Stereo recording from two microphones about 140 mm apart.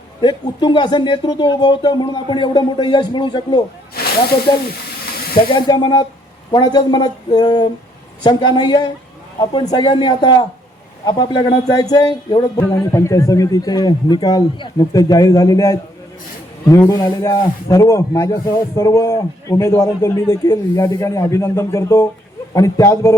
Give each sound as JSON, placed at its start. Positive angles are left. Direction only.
{"t": 0.2, "sound": "speech", "side_deg": 35}
{"t": 4.0, "sound": "snake", "side_deg": 90}
{"t": 5.5, "sound": "a man's voice", "side_deg": 30}